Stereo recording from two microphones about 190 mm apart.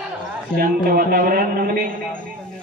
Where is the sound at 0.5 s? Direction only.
50° right (ahead or behind).